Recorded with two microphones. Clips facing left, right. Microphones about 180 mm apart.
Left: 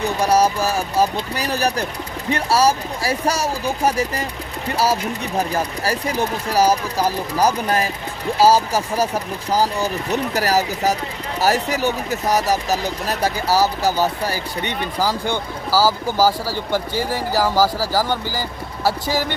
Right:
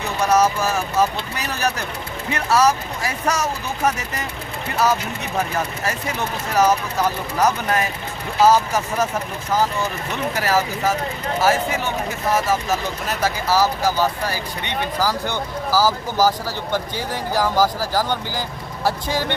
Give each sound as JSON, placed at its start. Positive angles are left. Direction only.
{"t": 0.0, "sound": "speech", "side_deg": 35}
{"t": 5.4, "sound": "speech", "side_deg": 35}
{"t": 15.0, "sound": "speech", "side_deg": 10}